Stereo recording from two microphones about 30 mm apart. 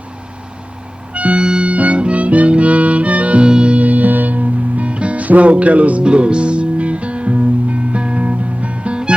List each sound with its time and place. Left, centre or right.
1.1 s music: right
3.4 s music: right
3.8 s music: right
6.0 s music: right